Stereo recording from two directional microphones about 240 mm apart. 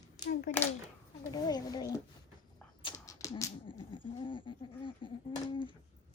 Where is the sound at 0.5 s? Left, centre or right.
Left.